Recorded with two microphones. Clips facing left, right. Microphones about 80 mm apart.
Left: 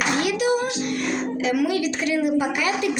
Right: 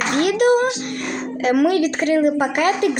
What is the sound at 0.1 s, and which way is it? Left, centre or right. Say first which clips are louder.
Music: right 8 dB; right.